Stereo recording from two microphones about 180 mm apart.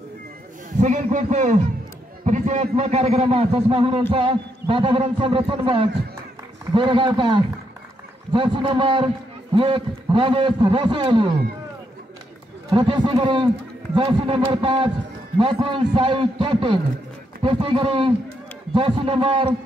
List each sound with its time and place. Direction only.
0.7 s a man's voice: 45° right (ahead or behind); by 11.3 s 30° right (ahead or behind)
12.6 s a man's voice: 25° right (ahead or behind)